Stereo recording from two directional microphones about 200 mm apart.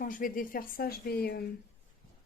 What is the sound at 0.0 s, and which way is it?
A woman's voice, 45° left (ahead or behind).